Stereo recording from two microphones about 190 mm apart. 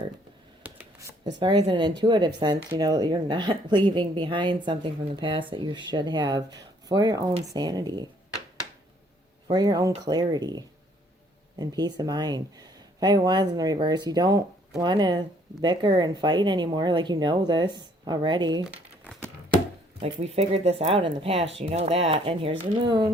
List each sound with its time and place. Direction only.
0.6 s a sound: 15° right (ahead or behind)
1.4 s speech: 25° right (ahead or behind)
9.5 s speech: 20° right (ahead or behind)
11.6 s speech: 20° right (ahead or behind)
20.1 s speech: 30° right (ahead or behind)